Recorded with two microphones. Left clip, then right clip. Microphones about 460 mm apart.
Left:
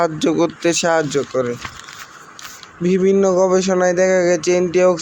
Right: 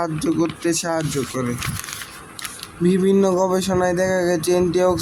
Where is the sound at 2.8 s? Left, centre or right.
Right.